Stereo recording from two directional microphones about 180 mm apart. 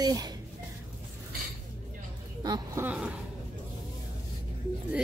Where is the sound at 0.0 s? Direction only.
20° right (ahead or behind).